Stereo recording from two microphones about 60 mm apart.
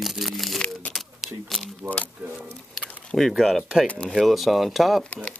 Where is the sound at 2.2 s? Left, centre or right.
Right.